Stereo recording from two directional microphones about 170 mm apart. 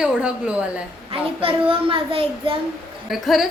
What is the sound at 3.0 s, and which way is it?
Speech, centre (ahead or behind).